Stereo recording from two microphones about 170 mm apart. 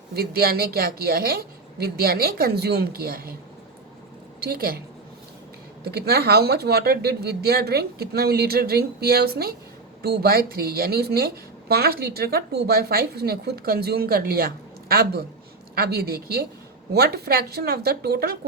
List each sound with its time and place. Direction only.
0.1 s speech: 65° right (ahead or behind)
4.4 s a woman's voice: 60° right (ahead or behind)
5.8 s speech: 70° right (ahead or behind)